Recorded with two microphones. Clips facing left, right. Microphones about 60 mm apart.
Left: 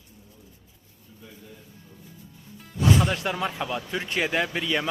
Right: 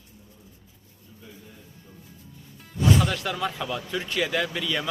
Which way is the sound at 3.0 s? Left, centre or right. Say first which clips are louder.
Left 1 dB; left.